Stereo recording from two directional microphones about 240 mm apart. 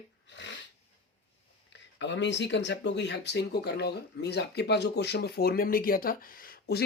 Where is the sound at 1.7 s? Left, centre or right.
Left.